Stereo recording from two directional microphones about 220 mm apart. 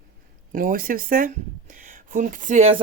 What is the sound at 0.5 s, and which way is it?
Speech, 40° right (ahead or behind).